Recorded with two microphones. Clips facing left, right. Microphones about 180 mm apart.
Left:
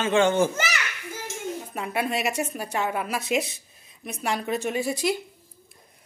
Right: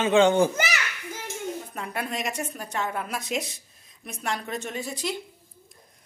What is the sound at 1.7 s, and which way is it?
A woman's voice, 5° left (ahead or behind).